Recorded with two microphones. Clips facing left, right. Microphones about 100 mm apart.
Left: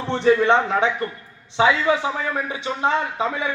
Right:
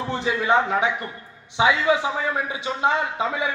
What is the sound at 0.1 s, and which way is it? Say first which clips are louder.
Speech: left 5 dB; 5° right (ahead or behind).